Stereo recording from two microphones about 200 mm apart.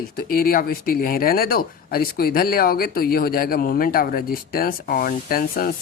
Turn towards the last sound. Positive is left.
turn(degrees=45)  # may be behind; listen again after turning